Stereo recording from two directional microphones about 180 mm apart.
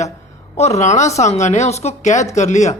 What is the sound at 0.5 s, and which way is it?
Speech, 35° left (ahead or behind).